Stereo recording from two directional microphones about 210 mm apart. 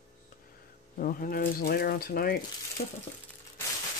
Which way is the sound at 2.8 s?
30° left (ahead or behind).